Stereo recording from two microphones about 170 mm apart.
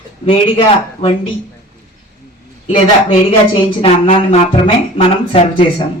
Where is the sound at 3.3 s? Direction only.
35° left (ahead or behind).